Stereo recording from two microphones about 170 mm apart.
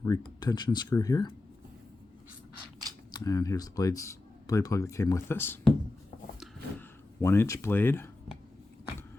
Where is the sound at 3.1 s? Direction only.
20° left (ahead or behind).